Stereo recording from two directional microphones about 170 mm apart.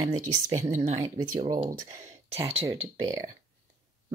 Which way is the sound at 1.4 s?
25° right (ahead or behind).